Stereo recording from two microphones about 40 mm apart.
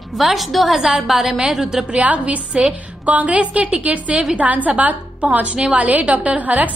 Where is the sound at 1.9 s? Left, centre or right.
Right.